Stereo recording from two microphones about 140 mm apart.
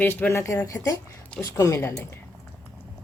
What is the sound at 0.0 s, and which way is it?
Speech, 15° left (ahead or behind).